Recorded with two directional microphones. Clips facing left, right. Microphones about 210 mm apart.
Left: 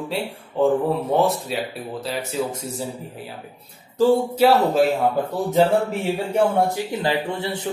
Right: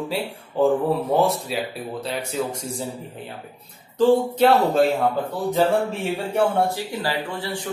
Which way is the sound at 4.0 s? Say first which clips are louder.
Even; 10° left (ahead or behind).